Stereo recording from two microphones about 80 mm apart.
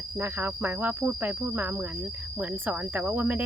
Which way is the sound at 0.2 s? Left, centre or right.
Right.